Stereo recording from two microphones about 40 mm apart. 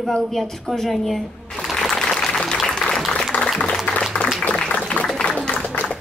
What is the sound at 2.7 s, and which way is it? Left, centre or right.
Applause, centre.